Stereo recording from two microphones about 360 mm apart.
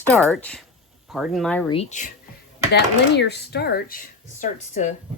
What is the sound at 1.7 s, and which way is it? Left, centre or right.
Speech, left.